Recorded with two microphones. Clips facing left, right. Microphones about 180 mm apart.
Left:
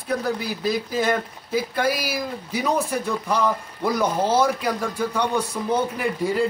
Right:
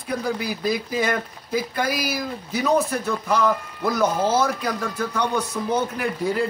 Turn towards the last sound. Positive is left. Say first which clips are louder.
# left 1 dB
turn(degrees=5)  # may be behind; listen again after turning